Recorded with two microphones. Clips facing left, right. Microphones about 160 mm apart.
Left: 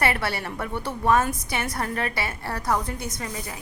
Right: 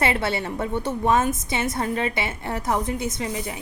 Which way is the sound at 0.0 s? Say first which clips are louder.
Right 2 dB; 25° right (ahead or behind).